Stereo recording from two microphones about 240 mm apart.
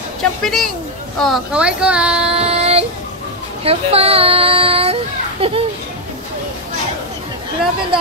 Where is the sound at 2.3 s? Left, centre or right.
Right.